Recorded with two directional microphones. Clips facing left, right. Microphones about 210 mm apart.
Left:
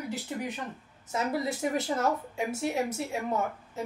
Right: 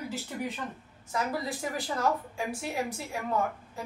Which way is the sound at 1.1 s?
25° left (ahead or behind).